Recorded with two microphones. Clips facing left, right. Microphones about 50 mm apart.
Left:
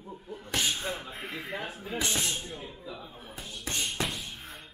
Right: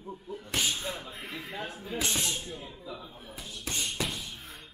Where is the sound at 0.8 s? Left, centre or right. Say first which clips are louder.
Left 2 dB; centre.